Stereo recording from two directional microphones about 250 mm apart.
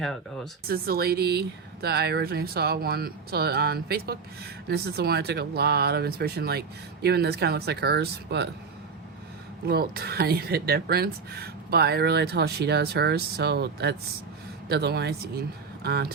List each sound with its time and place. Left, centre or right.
0.0 s speech: centre
0.7 s speech: right
9.6 s speech: right